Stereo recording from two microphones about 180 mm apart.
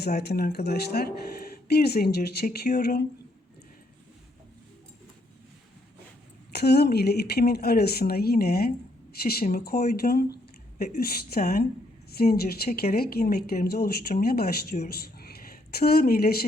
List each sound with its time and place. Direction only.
0.0 s speech: 65° left (ahead or behind)
6.5 s speech: 65° left (ahead or behind)
15.2 s a sound: 60° left (ahead or behind)